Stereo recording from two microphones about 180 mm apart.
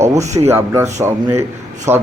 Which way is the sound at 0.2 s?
40° right (ahead or behind).